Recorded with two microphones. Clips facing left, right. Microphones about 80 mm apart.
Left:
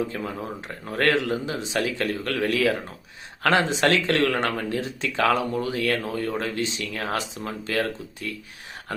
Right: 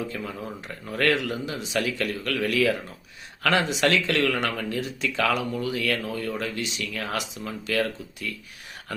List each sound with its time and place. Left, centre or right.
0.1 s speech: left